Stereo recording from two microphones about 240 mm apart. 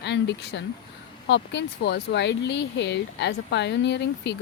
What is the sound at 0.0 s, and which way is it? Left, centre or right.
Speech, left.